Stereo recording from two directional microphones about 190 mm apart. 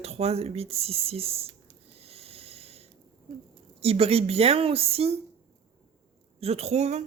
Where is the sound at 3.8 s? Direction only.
30° right (ahead or behind).